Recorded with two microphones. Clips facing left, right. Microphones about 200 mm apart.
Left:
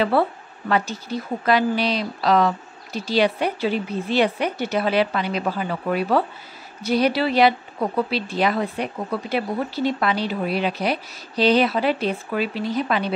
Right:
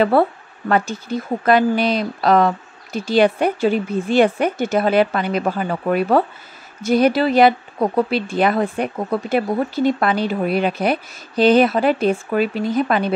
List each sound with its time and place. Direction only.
0.1 s speech: 50° right (ahead or behind)